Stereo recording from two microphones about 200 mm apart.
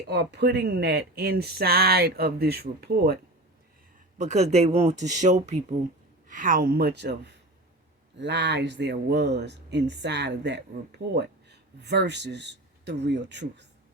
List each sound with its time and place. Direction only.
0.1 s speech: 55° right (ahead or behind)
4.2 s speech: 35° right (ahead or behind); by 13.7 s 60° right (ahead or behind)